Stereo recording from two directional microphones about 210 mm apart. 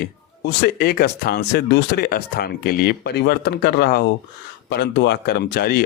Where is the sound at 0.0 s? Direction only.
50° left (ahead or behind).